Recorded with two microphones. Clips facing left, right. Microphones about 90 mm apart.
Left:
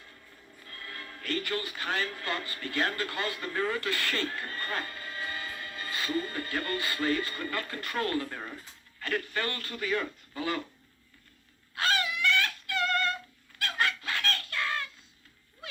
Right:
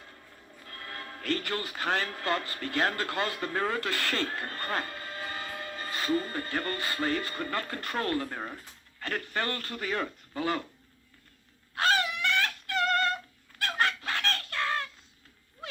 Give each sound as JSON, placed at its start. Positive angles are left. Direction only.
{"t": 0.6, "sound": "speech", "side_deg": -45}
{"t": 11.7, "sound": "fowl", "side_deg": -45}